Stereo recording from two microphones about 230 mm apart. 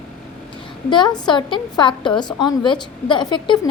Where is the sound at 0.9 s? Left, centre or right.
Centre.